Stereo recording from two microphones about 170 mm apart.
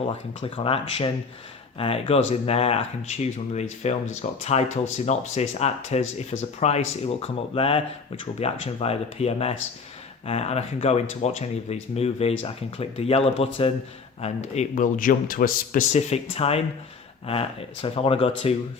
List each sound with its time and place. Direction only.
0.1 s speech: 35° left (ahead or behind)
17.8 s speech: 35° left (ahead or behind)